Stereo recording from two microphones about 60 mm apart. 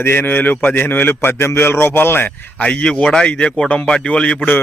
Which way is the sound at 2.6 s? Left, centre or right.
Left.